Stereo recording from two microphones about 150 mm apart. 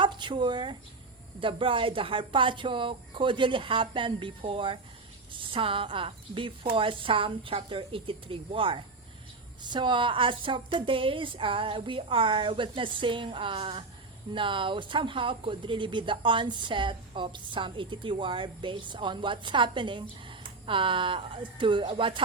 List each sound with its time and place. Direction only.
0.0 s speech: 30° right (ahead or behind)